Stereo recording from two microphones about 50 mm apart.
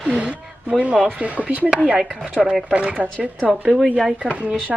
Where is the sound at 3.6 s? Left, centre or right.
Centre.